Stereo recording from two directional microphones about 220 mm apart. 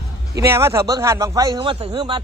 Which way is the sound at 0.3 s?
10° right (ahead or behind).